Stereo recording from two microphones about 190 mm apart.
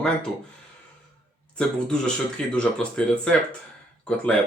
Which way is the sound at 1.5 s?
5° left (ahead or behind).